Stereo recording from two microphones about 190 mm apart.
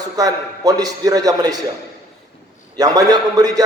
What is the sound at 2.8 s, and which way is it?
Speech, 20° right (ahead or behind).